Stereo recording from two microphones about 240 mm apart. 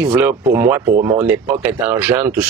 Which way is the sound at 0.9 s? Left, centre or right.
Right.